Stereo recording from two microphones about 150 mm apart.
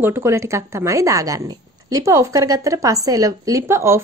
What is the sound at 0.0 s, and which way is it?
Speech, 15° right (ahead or behind).